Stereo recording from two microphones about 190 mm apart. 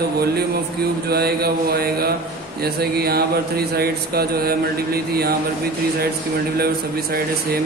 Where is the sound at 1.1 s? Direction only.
55° right (ahead or behind).